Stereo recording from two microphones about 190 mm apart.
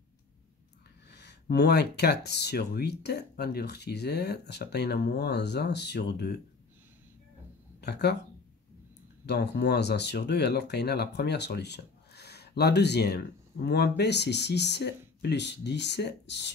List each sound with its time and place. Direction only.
1.1 s speech: 60° left (ahead or behind)
7.8 s speech: 60° left (ahead or behind)
9.2 s speech: 60° left (ahead or behind)